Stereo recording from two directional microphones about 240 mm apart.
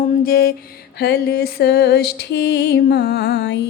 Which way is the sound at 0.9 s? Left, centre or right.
Left.